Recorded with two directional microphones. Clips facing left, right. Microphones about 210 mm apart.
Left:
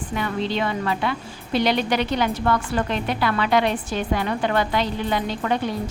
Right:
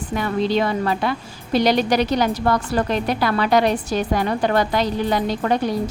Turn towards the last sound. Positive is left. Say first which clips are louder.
# right 3 dB
turn(degrees=-40)  # may be behind; listen again after turning